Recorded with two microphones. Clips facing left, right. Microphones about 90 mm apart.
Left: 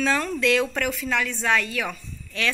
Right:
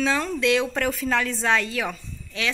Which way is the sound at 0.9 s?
35° right (ahead or behind).